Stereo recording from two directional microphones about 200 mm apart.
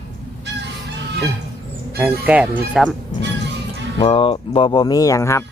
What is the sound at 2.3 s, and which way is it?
Speech, 5° right (ahead or behind).